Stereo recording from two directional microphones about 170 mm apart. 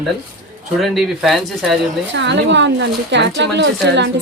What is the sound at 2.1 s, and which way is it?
Speech, 90° right.